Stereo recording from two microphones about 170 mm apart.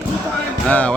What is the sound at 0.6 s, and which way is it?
Music, 10° left (ahead or behind).